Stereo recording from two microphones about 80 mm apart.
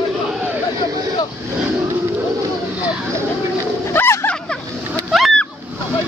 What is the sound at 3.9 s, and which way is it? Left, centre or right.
Dog, left.